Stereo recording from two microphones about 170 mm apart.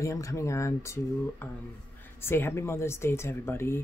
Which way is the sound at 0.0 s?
20° left (ahead or behind).